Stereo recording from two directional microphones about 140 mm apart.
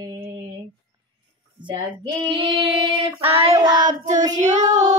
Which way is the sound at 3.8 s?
60° right (ahead or behind).